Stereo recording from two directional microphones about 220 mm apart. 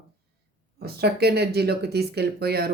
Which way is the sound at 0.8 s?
45° right (ahead or behind).